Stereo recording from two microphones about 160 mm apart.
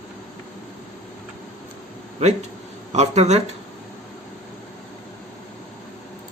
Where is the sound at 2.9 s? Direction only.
45° right (ahead or behind).